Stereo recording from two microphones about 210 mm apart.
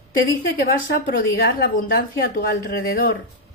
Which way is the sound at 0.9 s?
45° left (ahead or behind).